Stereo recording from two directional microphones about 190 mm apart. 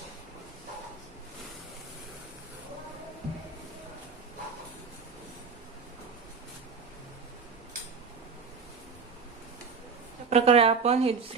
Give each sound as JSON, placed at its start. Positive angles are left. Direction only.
{"t": 10.2, "sound": "a woman's voice", "side_deg": -35}